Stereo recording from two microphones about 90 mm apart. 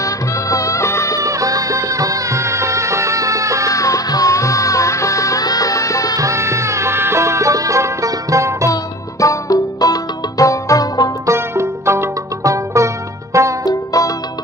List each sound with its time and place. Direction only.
0.0 s music: 40° left (ahead or behind)
1.2 s music: 40° right (ahead or behind)
3.7 s music: 40° left (ahead or behind)
6.1 s music: 35° right (ahead or behind)
9.2 s music: 40° left (ahead or behind)
11.2 s music: 30° right (ahead or behind)
13.7 s music: 40° left (ahead or behind)